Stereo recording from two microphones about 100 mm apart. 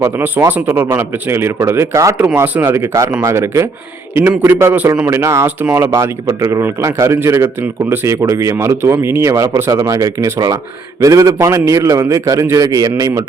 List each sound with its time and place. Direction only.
0.2 s speech: 20° right (ahead or behind)
2.1 s a man's voice: 20° right (ahead or behind)